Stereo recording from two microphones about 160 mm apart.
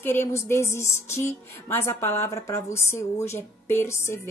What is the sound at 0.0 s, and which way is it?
Speech, 15° left (ahead or behind).